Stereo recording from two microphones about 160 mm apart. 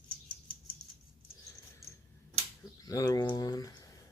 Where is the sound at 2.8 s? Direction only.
25° left (ahead or behind).